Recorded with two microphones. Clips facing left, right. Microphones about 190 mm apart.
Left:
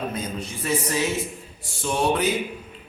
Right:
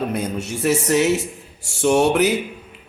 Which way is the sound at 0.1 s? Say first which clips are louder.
Right 6 dB; 70° right (ahead or behind).